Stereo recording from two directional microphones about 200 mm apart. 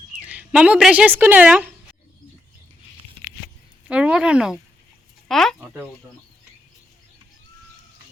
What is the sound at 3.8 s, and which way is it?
Speech, 5° right (ahead or behind).